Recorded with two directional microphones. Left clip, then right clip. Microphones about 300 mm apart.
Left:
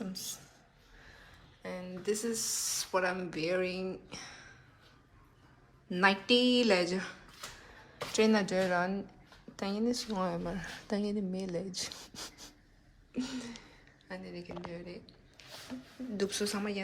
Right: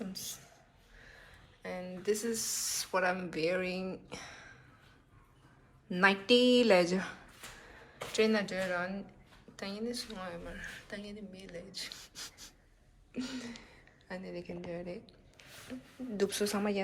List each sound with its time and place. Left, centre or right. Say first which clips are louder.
0.0 s a sound: left 1 dB; centre
1.6 s speech: right 1 dB; centre
5.9 s a woman's voice: right 1 dB; centre
16.1 s a woman's voice: right 2 dB; centre